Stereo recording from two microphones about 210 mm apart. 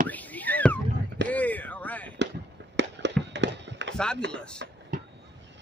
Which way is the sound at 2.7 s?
55° right (ahead or behind).